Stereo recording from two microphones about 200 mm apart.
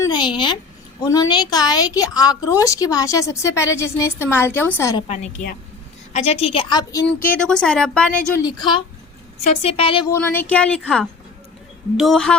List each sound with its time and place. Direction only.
0.0 s a sound: 20° left (ahead or behind)
1.0 s a woman's voice: 20° left (ahead or behind)
5.0 s a woman's voice: 35° left (ahead or behind)
7.3 s a woman's voice: 5° left (ahead or behind)
8.4 s a woman's voice: 20° left (ahead or behind)
9.4 s a woman's voice: 30° left (ahead or behind)
10.1 s a woman's voice: 10° left (ahead or behind)